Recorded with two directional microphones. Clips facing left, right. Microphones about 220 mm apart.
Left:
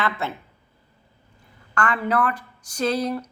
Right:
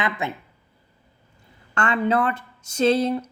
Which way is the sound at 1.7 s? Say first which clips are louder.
Right 2 dB; 25° right (ahead or behind).